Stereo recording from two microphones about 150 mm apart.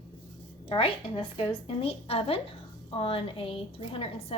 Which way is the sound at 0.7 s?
35° left (ahead or behind).